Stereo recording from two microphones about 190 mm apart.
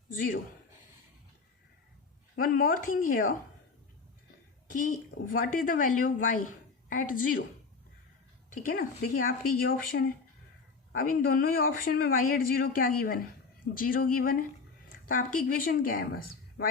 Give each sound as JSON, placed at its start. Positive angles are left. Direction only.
{"t": 0.1, "sound": "speech", "side_deg": 45}
{"t": 2.3, "sound": "a man's voice", "side_deg": 50}
{"t": 4.7, "sound": "a man's voice", "side_deg": 45}
{"t": 8.4, "sound": "a man's voice", "side_deg": 45}